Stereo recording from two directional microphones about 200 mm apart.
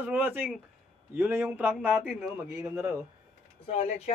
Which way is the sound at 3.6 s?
30° left (ahead or behind).